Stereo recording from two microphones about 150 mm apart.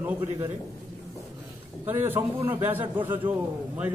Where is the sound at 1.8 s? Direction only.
15° right (ahead or behind).